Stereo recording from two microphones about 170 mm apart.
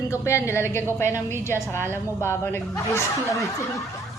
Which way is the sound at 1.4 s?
15° left (ahead or behind).